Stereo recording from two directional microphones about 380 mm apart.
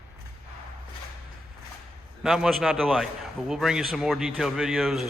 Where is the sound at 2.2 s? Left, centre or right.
Centre.